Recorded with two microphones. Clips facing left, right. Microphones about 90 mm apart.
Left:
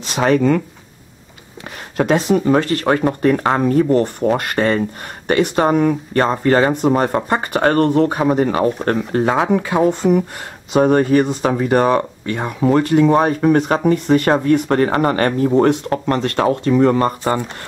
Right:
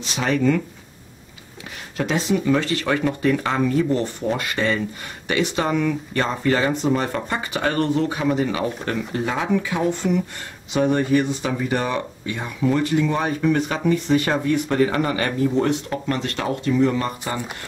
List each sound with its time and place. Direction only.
0.0 s speech: 50° left (ahead or behind)
2.0 s speech: 50° left (ahead or behind)